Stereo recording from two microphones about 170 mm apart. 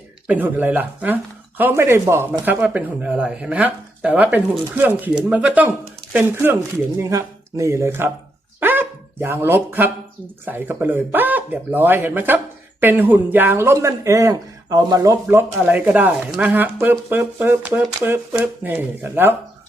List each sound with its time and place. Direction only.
0.3 s speech: 10° right (ahead or behind)